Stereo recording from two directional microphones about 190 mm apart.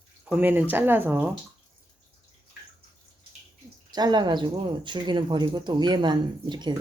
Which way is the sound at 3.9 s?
20° right (ahead or behind).